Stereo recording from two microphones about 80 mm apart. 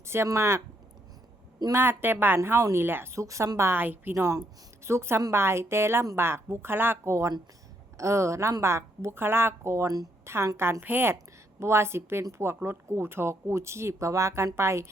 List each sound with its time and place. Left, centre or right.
0.0 s speech: right
1.7 s speech: right
3.6 s speech: right
4.1 s a woman's voice: right